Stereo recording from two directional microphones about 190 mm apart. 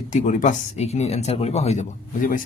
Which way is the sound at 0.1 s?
40° left (ahead or behind).